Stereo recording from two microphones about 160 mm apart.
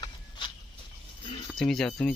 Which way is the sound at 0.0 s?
30° left (ahead or behind).